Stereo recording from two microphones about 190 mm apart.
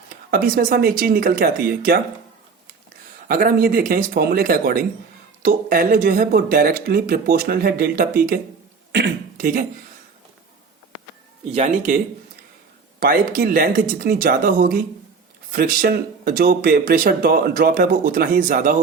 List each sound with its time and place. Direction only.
0.3 s speech: 50° right (ahead or behind)
3.2 s speech: 50° right (ahead or behind)
11.5 s speech: 40° right (ahead or behind)
13.0 s speech: 50° right (ahead or behind)